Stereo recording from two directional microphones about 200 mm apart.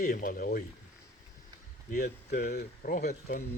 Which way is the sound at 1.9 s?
45° left (ahead or behind).